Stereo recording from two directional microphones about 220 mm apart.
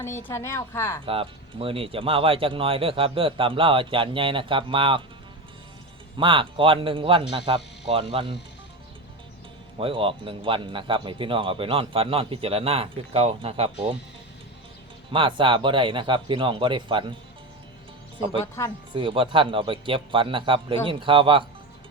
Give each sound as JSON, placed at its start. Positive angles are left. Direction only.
{"t": 0.0, "sound": "a woman's voice", "side_deg": 10}
{"t": 1.0, "sound": "speech", "side_deg": -25}
{"t": 6.1, "sound": "speech", "side_deg": -25}
{"t": 9.7, "sound": "speech", "side_deg": -25}
{"t": 15.1, "sound": "speech", "side_deg": -20}
{"t": 18.6, "sound": "a woman's voice", "side_deg": 15}
{"t": 18.9, "sound": "speech", "side_deg": -25}